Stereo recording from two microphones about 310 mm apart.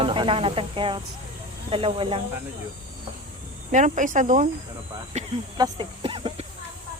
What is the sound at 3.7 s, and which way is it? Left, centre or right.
Speech, right.